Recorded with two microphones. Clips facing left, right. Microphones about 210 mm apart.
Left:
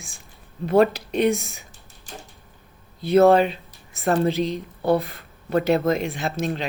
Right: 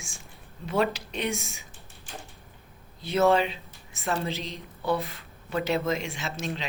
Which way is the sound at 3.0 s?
55° left (ahead or behind).